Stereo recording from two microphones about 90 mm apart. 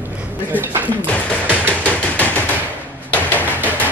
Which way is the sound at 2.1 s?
20° left (ahead or behind).